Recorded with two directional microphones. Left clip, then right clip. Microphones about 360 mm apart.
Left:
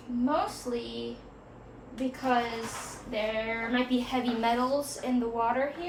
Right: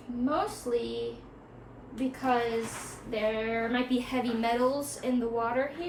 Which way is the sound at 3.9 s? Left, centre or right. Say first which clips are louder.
Left 1 dB; centre.